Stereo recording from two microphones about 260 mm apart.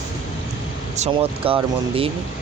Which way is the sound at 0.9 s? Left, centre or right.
Right.